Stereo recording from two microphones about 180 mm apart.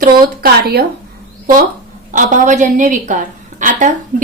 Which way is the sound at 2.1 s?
45° right (ahead or behind).